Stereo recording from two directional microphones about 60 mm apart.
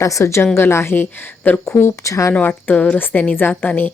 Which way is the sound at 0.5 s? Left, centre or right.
Left.